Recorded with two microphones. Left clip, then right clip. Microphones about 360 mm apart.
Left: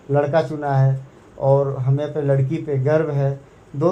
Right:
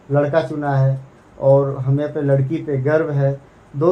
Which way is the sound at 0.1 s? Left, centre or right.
Centre.